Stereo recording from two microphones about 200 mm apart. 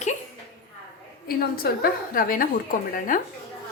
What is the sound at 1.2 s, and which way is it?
A woman's voice, 50° left (ahead or behind).